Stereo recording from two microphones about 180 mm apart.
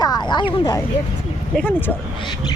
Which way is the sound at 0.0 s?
25° left (ahead or behind).